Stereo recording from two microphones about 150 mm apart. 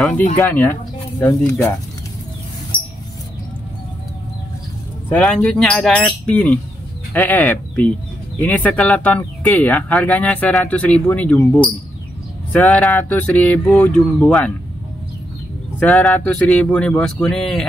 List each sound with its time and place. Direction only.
0.4 s speech: 15° left (ahead or behind)
2.7 s mouse: 35° left (ahead or behind)
5.1 s speech: 5° left (ahead or behind)
15.8 s speech: 5° left (ahead or behind)